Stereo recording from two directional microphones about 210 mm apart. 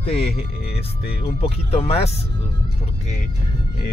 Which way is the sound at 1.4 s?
30° left (ahead or behind).